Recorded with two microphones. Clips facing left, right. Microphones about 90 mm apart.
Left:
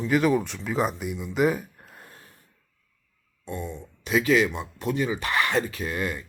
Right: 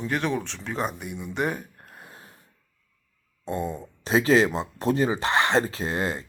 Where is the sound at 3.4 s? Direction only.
35° right (ahead or behind).